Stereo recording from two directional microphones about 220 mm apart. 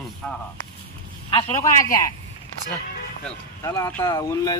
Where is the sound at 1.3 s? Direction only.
20° left (ahead or behind).